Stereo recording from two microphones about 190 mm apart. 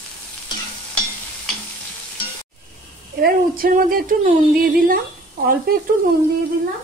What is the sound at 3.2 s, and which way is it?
Speech, 50° right (ahead or behind).